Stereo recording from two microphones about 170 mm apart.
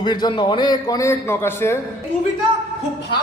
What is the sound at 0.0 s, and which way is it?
A man's voice, 25° left (ahead or behind).